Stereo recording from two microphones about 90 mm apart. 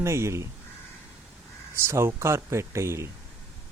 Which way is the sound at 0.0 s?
30° right (ahead or behind).